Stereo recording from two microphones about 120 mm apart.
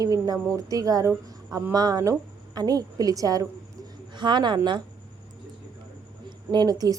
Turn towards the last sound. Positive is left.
turn(degrees=-30)  # may be behind; listen again after turning